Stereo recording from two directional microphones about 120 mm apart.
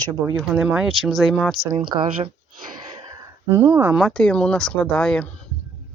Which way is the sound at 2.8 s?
30° right (ahead or behind).